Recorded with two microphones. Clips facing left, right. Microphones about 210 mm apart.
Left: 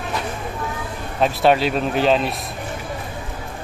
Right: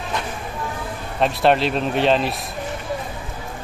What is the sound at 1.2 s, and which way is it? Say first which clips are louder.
Speech: left 1 dB; centre (ahead or behind).